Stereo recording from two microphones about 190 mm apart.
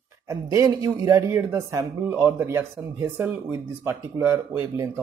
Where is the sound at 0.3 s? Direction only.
15° right (ahead or behind).